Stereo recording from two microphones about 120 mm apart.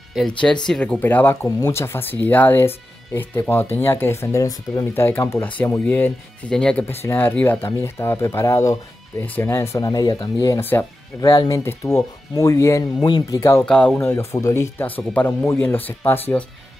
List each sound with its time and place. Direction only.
0.2 s speech: centre (ahead or behind)
6.9 s speech: 20° left (ahead or behind)
10.6 s speech: 15° left (ahead or behind)
11.1 s speech: 35° left (ahead or behind)
13.0 s speech: 35° left (ahead or behind)
13.4 s speech: 20° left (ahead or behind)
13.7 s speech: 5° left (ahead or behind)
13.9 s speech: 25° left (ahead or behind)